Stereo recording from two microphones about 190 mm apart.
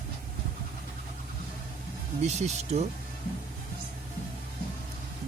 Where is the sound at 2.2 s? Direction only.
35° right (ahead or behind).